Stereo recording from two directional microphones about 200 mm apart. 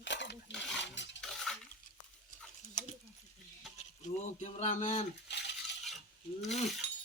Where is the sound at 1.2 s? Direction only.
Centre (ahead or behind).